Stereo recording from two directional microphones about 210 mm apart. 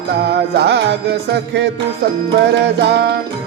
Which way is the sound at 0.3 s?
50° right (ahead or behind).